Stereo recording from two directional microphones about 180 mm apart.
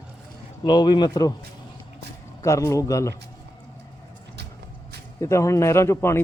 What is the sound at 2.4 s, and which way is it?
Speech, 15° left (ahead or behind).